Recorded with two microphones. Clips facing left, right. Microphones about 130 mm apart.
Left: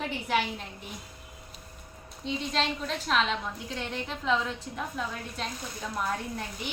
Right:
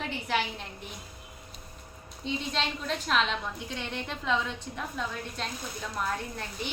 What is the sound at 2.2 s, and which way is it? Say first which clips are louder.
A woman's voice: left 2 dB; centre (ahead or behind).